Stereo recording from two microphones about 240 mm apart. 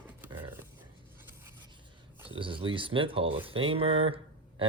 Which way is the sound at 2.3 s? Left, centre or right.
Right.